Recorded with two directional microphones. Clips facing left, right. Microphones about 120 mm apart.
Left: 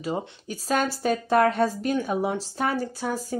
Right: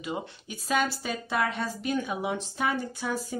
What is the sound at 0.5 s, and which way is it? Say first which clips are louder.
Speech: left 2 dB; 40° left (ahead or behind).